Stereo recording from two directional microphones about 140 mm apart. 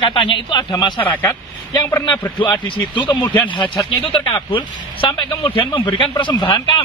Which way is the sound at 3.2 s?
10° left (ahead or behind).